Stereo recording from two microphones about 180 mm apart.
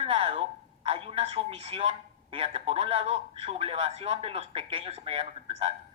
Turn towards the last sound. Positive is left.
turn(degrees=-30)  # may be behind; listen again after turning